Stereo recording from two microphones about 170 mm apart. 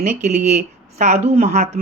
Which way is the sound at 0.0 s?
45° right (ahead or behind).